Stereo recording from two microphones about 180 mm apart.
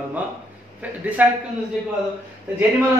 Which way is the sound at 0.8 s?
10° right (ahead or behind).